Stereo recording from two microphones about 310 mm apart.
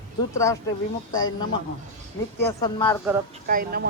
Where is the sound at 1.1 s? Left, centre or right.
Centre.